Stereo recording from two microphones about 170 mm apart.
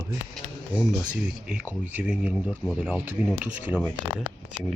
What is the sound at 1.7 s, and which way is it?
Speech, 10° right (ahead or behind).